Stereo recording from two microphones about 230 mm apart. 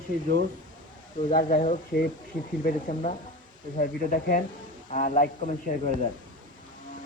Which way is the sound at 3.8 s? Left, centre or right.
Left.